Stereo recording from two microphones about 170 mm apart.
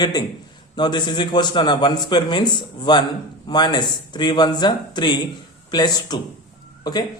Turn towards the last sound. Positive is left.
turn(degrees=25)  # may be behind; listen again after turning